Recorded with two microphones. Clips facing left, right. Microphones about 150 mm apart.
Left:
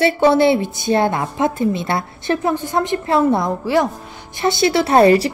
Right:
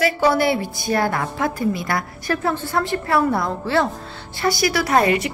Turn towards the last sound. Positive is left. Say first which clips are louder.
# left 6 dB
turn(degrees=30)  # may be behind; listen again after turning